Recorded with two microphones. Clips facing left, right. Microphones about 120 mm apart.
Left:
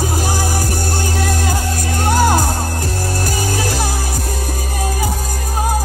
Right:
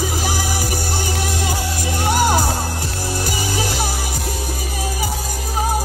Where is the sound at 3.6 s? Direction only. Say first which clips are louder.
Left 2 dB; 45° left (ahead or behind).